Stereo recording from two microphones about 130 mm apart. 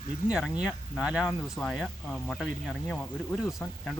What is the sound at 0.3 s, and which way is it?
Speech, 5° right (ahead or behind).